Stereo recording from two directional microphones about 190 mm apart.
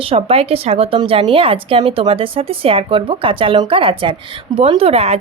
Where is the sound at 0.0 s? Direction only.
30° right (ahead or behind).